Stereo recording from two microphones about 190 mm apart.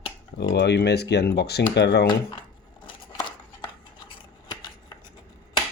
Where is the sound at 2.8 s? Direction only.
25° left (ahead or behind).